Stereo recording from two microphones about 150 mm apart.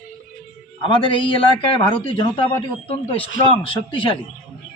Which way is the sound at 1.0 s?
35° left (ahead or behind).